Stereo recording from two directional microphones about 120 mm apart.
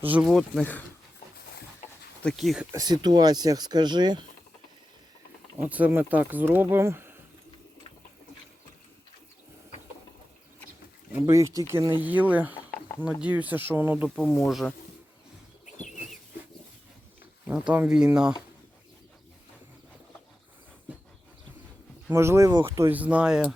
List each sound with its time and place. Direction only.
0.1 s speech: 10° right (ahead or behind)
2.3 s speech: centre (ahead or behind)
2.7 s speech: 35° right (ahead or behind)
5.5 s speech: 15° right (ahead or behind)
11.3 s speech: 25° right (ahead or behind)
14.2 s speech: centre (ahead or behind)
17.7 s speech: 10° right (ahead or behind)
22.1 s speech: 25° right (ahead or behind); by 23.6 s 5° right (ahead or behind)